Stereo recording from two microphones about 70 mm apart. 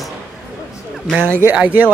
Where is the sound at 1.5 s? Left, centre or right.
Right.